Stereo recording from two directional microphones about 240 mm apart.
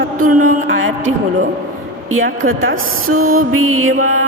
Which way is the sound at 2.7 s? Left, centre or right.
Right.